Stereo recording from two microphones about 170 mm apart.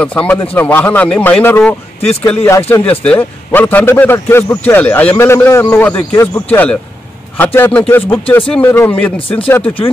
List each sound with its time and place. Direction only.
0.0 s speech: 5° left (ahead or behind)